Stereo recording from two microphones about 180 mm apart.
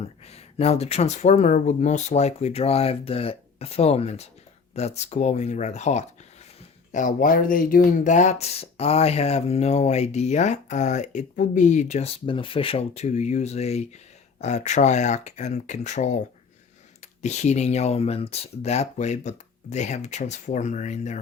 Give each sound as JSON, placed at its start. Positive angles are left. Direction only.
{"t": 0.0, "sound": "speech", "side_deg": 35}
{"t": 17.2, "sound": "speech", "side_deg": 40}